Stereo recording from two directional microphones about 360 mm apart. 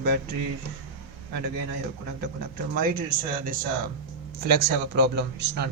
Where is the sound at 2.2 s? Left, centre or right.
Right.